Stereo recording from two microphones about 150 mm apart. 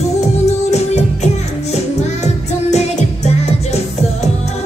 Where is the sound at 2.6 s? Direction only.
45° left (ahead or behind).